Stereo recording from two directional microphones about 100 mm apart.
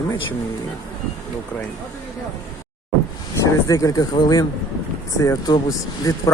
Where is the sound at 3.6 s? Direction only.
35° left (ahead or behind).